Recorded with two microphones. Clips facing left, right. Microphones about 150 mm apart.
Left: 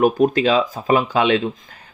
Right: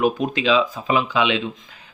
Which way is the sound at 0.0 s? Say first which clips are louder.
Left 5 dB; 45° left (ahead or behind).